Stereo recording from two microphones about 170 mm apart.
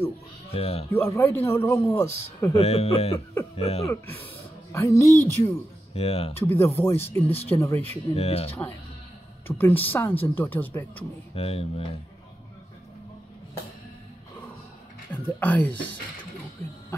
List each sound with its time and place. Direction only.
0.5 s speech: 35° left (ahead or behind)
0.9 s speech: 15° left (ahead or behind)
2.5 s speech: 35° left (ahead or behind)
3.9 s speech: 15° left (ahead or behind)
5.9 s speech: 35° left (ahead or behind)
6.3 s speech: 15° left (ahead or behind)
8.2 s speech: 35° left (ahead or behind)
9.5 s speech: 10° left (ahead or behind)
11.3 s speech: 35° left (ahead or behind)
15.1 s speech: 10° left (ahead or behind)